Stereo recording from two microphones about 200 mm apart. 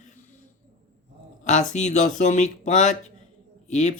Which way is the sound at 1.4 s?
35° left (ahead or behind).